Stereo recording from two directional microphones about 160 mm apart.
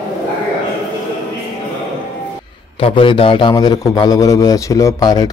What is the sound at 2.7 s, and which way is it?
A man's voice, 35° left (ahead or behind).